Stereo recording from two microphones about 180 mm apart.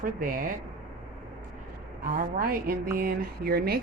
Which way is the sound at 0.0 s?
50° right (ahead or behind).